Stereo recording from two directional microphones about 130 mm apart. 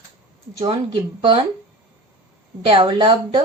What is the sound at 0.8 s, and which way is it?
Speech, 40° right (ahead or behind).